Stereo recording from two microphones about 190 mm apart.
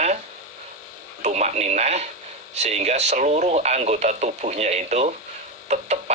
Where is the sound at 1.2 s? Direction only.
35° right (ahead or behind).